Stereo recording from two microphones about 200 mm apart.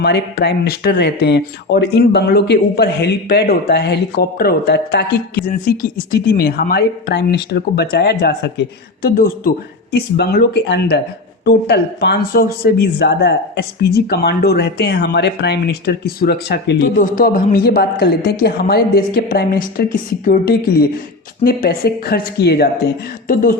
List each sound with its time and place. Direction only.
0.0 s speech: 55° left (ahead or behind)
23.3 s speech: 40° left (ahead or behind)